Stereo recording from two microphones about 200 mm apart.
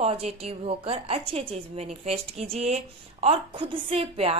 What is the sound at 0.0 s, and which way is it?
A woman's voice, 30° right (ahead or behind).